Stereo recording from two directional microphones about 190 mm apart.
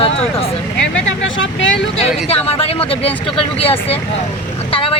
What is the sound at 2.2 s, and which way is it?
Speech, 30° left (ahead or behind).